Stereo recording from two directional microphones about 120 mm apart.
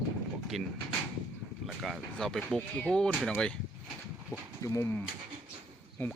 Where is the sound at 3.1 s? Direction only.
5° right (ahead or behind).